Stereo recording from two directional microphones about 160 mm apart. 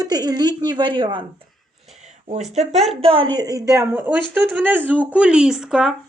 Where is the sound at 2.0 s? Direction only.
45° right (ahead or behind).